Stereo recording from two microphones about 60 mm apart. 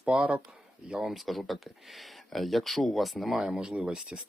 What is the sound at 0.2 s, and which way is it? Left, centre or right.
Speech, right.